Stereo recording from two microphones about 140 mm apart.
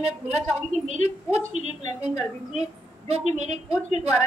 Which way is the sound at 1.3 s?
55° right (ahead or behind).